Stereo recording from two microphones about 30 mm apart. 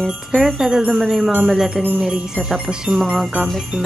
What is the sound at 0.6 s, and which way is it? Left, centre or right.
Jingle bell, right.